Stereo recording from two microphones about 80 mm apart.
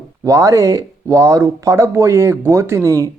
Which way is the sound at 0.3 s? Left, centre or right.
Right.